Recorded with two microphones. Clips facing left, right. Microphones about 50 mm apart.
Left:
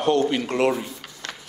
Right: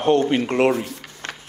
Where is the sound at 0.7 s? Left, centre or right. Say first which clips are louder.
Right 3 dB; right.